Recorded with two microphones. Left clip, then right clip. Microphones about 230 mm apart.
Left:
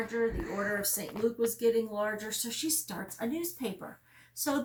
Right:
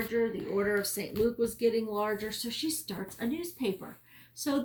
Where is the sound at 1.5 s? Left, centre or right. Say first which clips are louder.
Even; centre.